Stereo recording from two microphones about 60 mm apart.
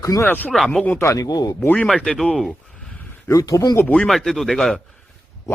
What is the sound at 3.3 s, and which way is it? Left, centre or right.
Speech, left.